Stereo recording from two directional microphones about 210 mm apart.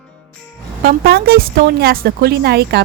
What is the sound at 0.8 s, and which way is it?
Speech, 45° right (ahead or behind).